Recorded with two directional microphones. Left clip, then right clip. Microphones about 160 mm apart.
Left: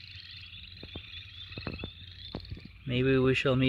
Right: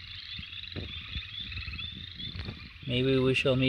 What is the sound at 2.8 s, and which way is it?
Speech, centre (ahead or behind).